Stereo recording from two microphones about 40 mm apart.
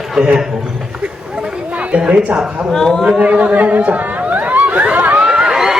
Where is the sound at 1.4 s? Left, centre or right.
Right.